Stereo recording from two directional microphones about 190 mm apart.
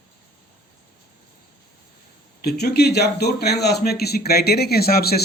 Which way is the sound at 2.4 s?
60° left (ahead or behind).